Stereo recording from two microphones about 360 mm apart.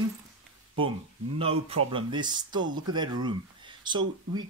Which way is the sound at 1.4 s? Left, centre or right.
Centre.